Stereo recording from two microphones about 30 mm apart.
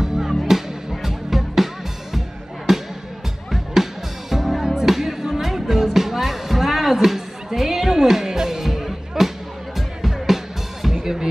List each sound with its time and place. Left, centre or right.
0.0 s music: centre